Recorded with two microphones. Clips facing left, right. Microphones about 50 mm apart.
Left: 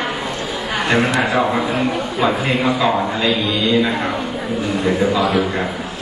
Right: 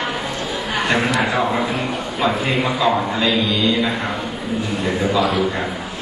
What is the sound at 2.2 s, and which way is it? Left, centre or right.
A man's voice, centre.